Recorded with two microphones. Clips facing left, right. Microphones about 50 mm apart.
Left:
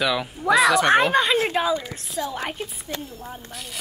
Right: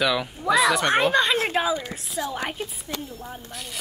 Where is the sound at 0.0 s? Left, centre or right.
Centre.